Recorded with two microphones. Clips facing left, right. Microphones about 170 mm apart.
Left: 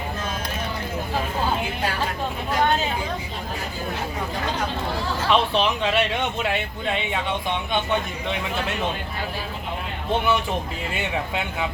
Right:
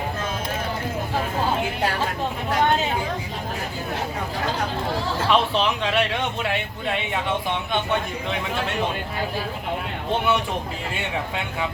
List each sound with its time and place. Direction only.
5.3 s speech: centre (ahead or behind)